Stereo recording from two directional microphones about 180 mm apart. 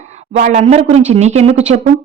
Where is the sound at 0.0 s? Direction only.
40° right (ahead or behind).